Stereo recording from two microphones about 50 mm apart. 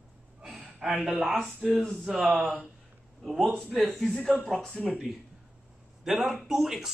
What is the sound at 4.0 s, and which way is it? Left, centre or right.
Speech, centre.